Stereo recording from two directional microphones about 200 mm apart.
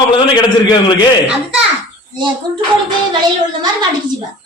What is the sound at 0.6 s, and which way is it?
Speech, 20° left (ahead or behind).